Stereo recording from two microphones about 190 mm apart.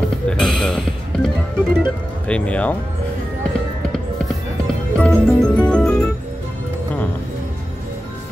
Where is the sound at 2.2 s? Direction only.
5° left (ahead or behind).